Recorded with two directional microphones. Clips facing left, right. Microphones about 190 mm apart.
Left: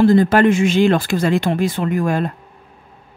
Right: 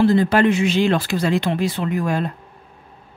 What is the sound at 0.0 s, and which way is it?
Speech, 45° left (ahead or behind).